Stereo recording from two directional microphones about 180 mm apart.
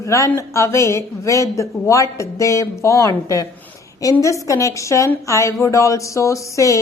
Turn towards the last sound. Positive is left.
turn(degrees=15)  # may be behind; listen again after turning